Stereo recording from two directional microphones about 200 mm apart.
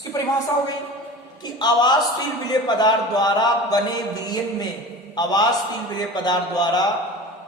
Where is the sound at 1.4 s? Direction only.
20° left (ahead or behind).